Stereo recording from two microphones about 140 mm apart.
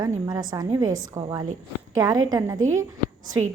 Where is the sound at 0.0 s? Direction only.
30° right (ahead or behind).